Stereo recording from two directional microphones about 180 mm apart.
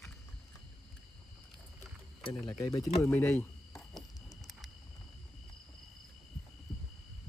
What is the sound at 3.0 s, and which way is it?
Speech, 10° left (ahead or behind).